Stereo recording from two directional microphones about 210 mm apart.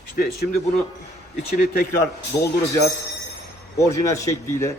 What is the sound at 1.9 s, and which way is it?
Speech, 15° left (ahead or behind).